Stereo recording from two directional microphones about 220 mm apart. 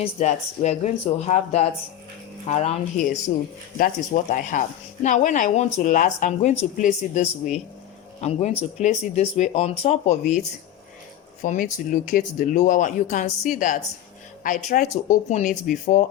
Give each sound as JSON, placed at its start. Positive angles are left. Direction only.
{"t": 0.0, "sound": "speech", "side_deg": 30}
{"t": 11.4, "sound": "speech", "side_deg": 35}